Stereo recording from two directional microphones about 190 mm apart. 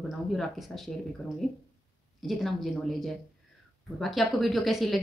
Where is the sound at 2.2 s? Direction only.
Centre (ahead or behind).